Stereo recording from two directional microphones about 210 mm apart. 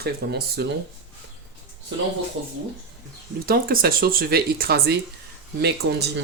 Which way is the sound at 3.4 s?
45° right (ahead or behind).